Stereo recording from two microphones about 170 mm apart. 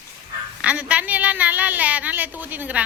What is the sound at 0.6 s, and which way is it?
Speech, 10° right (ahead or behind).